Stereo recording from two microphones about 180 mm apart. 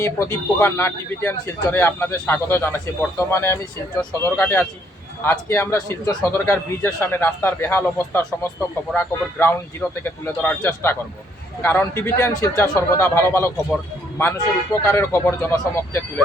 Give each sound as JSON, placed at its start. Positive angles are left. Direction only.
{"t": 0.0, "sound": "a man's voice", "side_deg": 15}